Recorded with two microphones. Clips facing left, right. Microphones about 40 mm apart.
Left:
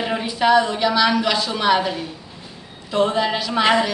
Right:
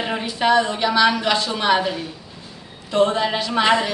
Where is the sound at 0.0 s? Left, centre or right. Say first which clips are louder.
Left 1 dB; centre.